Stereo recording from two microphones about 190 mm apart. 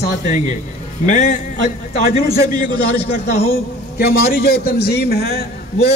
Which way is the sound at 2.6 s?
50° left (ahead or behind).